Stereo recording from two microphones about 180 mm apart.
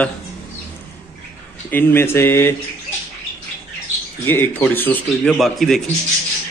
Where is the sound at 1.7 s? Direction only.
10° left (ahead or behind).